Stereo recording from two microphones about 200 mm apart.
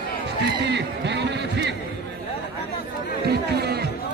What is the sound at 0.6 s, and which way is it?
Music, 60° right (ahead or behind).